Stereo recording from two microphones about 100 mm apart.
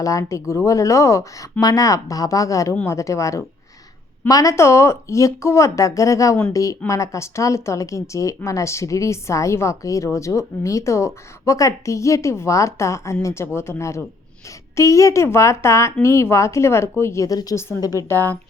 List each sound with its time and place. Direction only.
0.0 s a woman's voice: 35° left (ahead or behind)
18.1 s a woman's voice: 20° left (ahead or behind)